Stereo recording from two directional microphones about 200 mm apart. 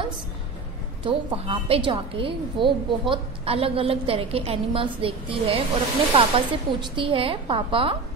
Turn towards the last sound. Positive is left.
turn(degrees=-25)  # may be behind; listen again after turning